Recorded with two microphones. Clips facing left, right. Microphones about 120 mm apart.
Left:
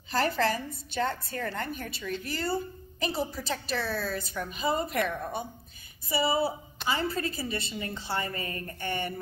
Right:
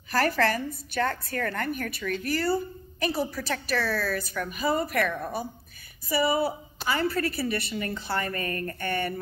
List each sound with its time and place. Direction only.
0.1 s a woman's voice: 25° left (ahead or behind)